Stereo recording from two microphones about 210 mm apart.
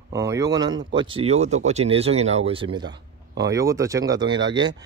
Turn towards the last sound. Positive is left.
turn(degrees=-20)  # may be behind; listen again after turning